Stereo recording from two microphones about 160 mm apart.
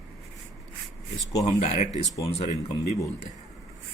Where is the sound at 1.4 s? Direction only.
40° left (ahead or behind).